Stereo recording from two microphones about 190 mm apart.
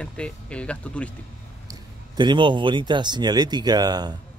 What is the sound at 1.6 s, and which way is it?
Speech, 20° right (ahead or behind).